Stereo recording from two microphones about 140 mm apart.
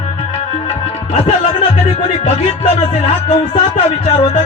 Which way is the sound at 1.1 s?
55° left (ahead or behind).